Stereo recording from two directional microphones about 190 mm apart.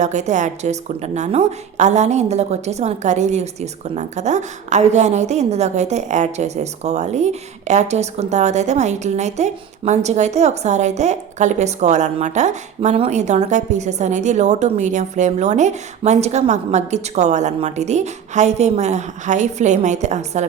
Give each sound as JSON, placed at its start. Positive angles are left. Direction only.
{"t": 0.0, "sound": "a woman's voice", "side_deg": -40}